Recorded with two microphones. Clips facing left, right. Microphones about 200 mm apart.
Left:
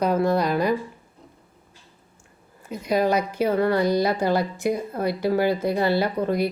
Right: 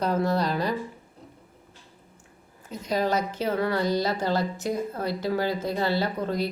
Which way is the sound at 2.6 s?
10° left (ahead or behind).